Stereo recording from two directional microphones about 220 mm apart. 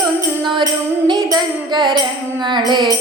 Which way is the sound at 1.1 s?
20° right (ahead or behind).